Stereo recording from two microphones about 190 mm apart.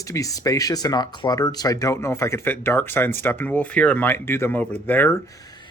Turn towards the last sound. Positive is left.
turn(degrees=20)  # may be behind; listen again after turning